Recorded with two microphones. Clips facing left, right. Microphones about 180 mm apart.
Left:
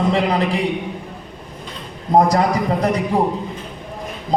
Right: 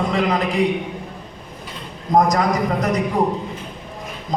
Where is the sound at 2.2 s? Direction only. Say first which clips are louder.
Left 2 dB; 30° left (ahead or behind).